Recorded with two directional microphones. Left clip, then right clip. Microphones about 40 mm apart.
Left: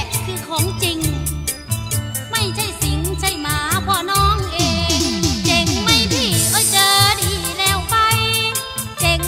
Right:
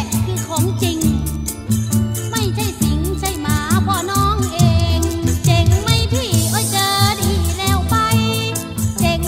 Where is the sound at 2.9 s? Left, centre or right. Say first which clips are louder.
Left 1 dB; left.